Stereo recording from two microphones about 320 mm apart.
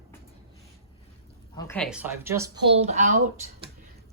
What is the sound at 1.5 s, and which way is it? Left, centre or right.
A woman's voice, centre.